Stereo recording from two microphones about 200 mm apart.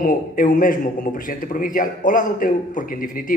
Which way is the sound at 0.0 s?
40° left (ahead or behind).